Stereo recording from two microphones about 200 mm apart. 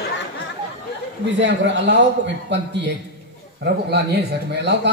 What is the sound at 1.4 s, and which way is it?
A man's voice, 60° right (ahead or behind).